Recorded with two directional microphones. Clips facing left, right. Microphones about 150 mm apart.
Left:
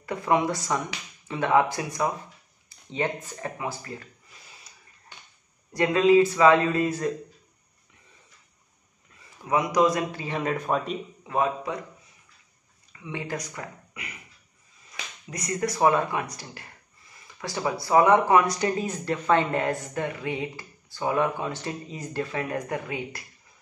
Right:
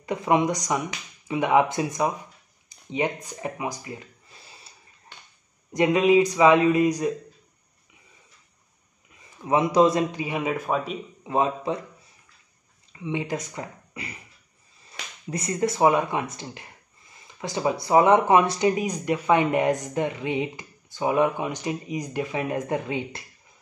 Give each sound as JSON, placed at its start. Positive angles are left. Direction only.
{"t": 0.0, "sound": "speech", "side_deg": -20}
{"t": 4.7, "sound": "a sound", "side_deg": -30}
{"t": 5.7, "sound": "speech", "side_deg": -20}
{"t": 9.5, "sound": "speech", "side_deg": -25}
{"t": 10.2, "sound": "speech", "side_deg": -10}
{"t": 11.2, "sound": "speech", "side_deg": -25}
{"t": 12.9, "sound": "speech", "side_deg": -20}